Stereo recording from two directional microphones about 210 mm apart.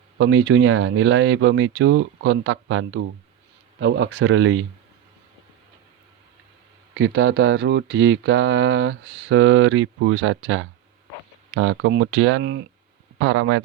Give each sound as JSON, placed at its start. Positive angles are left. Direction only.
{"t": 0.2, "sound": "speech", "side_deg": -60}
{"t": 6.9, "sound": "speech", "side_deg": -55}